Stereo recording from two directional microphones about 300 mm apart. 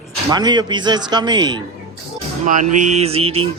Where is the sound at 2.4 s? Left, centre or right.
Right.